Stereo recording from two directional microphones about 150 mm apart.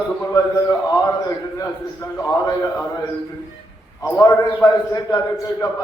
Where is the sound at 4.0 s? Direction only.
20° left (ahead or behind).